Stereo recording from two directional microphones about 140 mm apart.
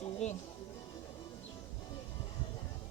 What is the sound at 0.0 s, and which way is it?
Music, 55° left (ahead or behind).